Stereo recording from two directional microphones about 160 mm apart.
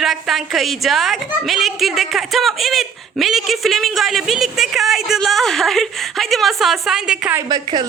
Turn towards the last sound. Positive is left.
turn(degrees=-25)  # may be behind; listen again after turning